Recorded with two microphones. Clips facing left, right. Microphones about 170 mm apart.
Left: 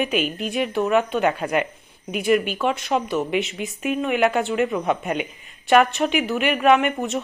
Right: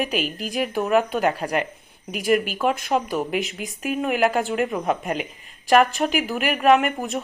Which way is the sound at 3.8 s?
5° right (ahead or behind).